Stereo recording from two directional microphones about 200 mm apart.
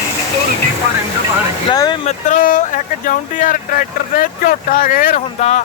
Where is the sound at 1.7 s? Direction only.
20° left (ahead or behind).